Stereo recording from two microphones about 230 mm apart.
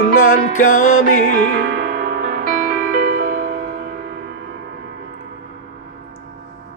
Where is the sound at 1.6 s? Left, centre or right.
Right.